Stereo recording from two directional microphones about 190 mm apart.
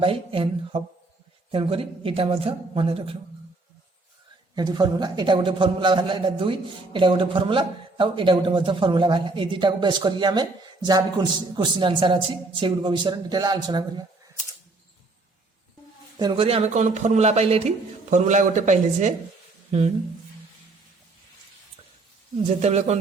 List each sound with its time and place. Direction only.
0.0 s a man's voice: 30° right (ahead or behind)
4.5 s a man's voice: 20° right (ahead or behind)
16.1 s a man's voice: 25° right (ahead or behind)
22.4 s a man's voice: 35° right (ahead or behind)